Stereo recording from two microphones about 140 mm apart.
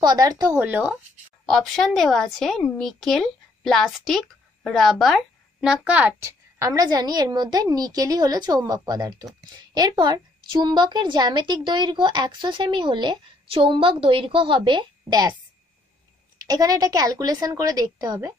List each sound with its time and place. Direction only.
0.0 s a woman's voice: 30° right (ahead or behind)
0.6 s speech: 10° right (ahead or behind)
1.4 s speech: centre (ahead or behind); by 15.3 s 30° right (ahead or behind)
16.4 s a woman's voice: 25° right (ahead or behind)